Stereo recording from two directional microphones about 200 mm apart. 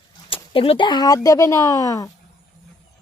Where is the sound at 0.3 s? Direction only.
25° left (ahead or behind).